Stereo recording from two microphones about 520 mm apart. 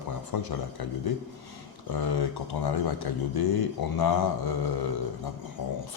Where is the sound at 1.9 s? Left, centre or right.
Left.